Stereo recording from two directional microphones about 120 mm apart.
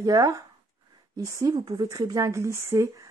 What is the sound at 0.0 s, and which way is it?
Speech, 30° right (ahead or behind).